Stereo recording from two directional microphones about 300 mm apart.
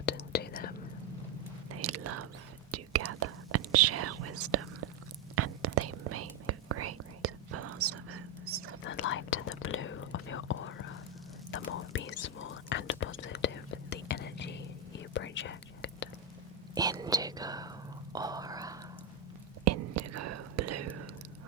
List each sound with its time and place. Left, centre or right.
0.0 s whispering: left
1.7 s whispering: right
8.8 s whispering: left
16.7 s whispering: centre
19.6 s whispering: right